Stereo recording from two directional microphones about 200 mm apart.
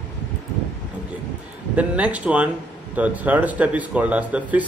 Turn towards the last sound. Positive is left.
turn(degrees=-5)  # may be behind; listen again after turning